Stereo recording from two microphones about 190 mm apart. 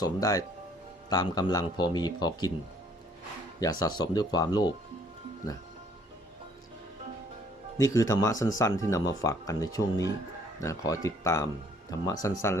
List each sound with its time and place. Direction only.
0.0 s speech: 20° left (ahead or behind)
3.6 s speech: 20° left (ahead or behind)
7.8 s speech: 15° left (ahead or behind)